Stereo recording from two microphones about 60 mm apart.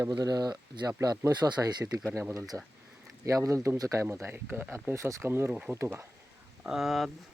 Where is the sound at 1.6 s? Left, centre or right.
Right.